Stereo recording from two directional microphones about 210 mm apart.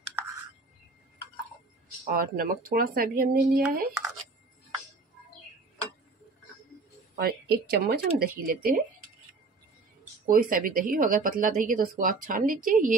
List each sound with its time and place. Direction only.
2.0 s speech: 45° right (ahead or behind)
7.2 s speech: 50° right (ahead or behind)
10.2 s speech: 40° right (ahead or behind)